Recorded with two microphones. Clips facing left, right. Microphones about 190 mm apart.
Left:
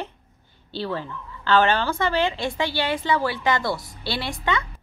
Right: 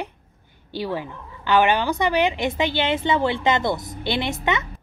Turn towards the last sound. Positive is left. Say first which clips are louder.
# right 3 dB
turn(degrees=-20)  # may be behind; listen again after turning